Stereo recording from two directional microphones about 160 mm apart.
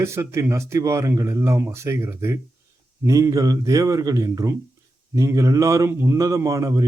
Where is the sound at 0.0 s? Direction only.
15° right (ahead or behind).